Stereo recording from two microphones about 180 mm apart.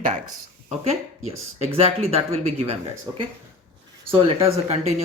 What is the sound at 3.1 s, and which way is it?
Speech, 20° right (ahead or behind).